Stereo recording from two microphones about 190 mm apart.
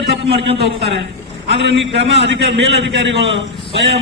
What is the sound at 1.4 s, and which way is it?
A man's voice, 70° right (ahead or behind).